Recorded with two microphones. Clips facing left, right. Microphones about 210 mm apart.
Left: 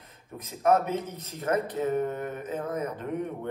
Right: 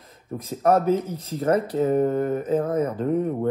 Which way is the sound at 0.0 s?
30° right (ahead or behind).